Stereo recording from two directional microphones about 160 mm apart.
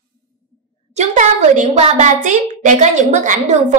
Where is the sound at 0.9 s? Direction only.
50° right (ahead or behind).